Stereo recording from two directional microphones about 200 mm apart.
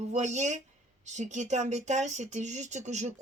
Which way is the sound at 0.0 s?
35° right (ahead or behind).